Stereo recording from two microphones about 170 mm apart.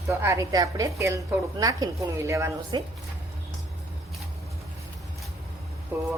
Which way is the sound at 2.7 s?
30° right (ahead or behind).